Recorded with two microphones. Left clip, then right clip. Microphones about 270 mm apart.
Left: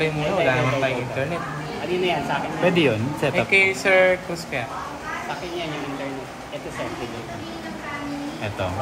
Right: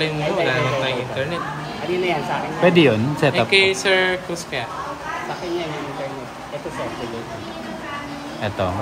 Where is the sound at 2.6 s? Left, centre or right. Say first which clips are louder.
Right 6 dB; right.